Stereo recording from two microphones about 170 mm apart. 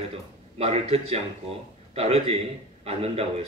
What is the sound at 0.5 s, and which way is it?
A man's voice, 35° right (ahead or behind).